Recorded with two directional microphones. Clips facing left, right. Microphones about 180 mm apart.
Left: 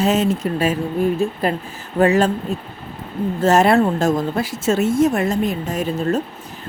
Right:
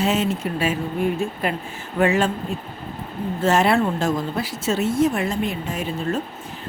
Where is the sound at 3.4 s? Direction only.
45° left (ahead or behind).